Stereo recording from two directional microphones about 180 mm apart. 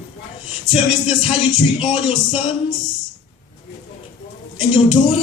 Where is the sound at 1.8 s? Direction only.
30° left (ahead or behind).